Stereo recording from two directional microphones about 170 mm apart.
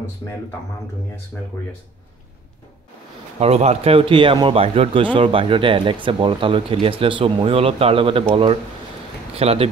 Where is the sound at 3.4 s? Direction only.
40° right (ahead or behind).